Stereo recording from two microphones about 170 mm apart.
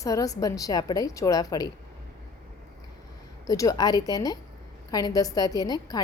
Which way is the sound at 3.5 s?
20° left (ahead or behind).